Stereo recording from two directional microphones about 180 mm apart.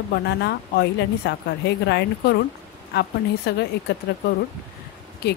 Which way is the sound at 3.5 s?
65° left (ahead or behind).